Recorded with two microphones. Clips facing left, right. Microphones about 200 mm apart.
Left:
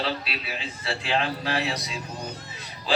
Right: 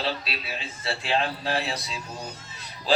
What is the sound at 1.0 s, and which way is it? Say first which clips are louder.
Speech: even; 30° right (ahead or behind).